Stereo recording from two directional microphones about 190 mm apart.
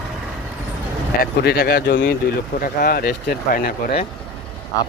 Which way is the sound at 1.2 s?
55° left (ahead or behind).